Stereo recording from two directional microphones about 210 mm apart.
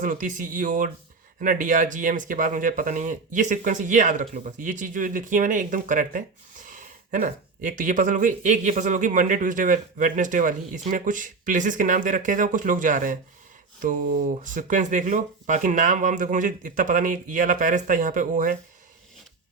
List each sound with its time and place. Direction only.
0.0 s speech: 40° right (ahead or behind)